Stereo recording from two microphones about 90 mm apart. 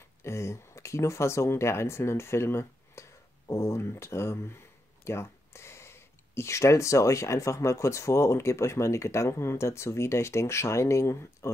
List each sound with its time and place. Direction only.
0.2 s speech: 30° left (ahead or behind)